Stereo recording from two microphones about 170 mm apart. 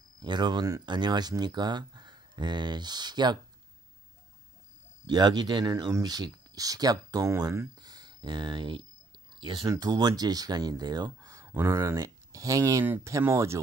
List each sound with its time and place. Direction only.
0.2 s speech: 25° right (ahead or behind)
5.0 s speech: 25° right (ahead or behind)